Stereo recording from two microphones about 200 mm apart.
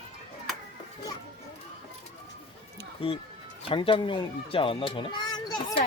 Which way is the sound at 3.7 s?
25° left (ahead or behind).